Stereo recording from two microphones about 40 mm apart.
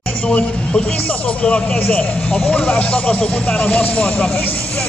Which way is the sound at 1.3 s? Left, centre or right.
Left.